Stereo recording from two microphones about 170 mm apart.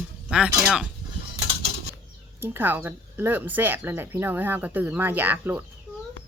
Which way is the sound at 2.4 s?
10° right (ahead or behind).